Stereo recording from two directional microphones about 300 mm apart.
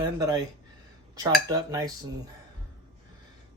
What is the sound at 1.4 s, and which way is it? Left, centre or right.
Speech, centre.